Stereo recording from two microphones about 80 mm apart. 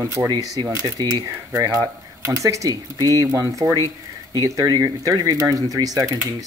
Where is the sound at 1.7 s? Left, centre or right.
Right.